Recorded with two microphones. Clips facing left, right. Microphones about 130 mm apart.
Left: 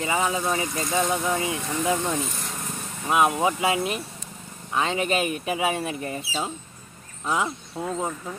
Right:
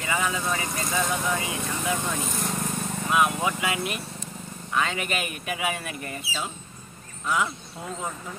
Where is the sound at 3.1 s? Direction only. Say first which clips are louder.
Left 3 dB; 30° left (ahead or behind).